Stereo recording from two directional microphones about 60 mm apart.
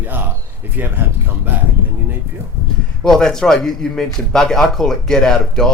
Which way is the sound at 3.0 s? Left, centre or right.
Centre.